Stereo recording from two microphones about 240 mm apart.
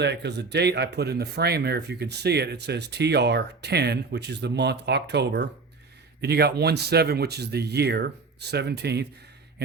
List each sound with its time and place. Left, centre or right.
0.0 s speech: right